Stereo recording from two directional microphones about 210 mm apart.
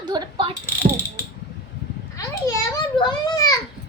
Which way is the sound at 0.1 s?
20° right (ahead or behind).